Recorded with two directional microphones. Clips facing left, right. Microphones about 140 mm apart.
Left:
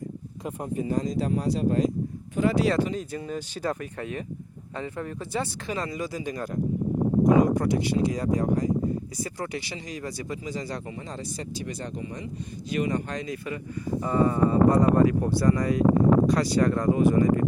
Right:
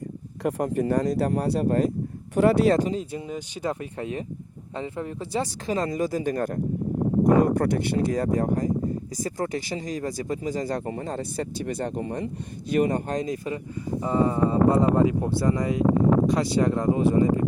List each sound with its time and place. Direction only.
0.4 s speech: 75° right (ahead or behind)
2.6 s speech: 40° right (ahead or behind)
2.9 s speech: 25° right (ahead or behind)
5.3 s speech: 35° right (ahead or behind)
14.0 s speech: 20° right (ahead or behind)
16.9 s speech: 25° right (ahead or behind)